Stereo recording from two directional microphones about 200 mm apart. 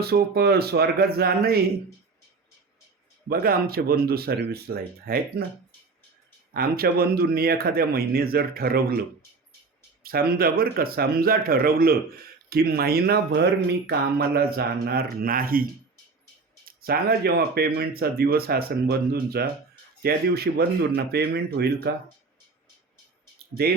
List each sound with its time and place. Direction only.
0.0 s speech: 50° right (ahead or behind)
3.2 s speech: 50° right (ahead or behind)
6.5 s speech: 50° right (ahead or behind)
10.0 s speech: 50° right (ahead or behind)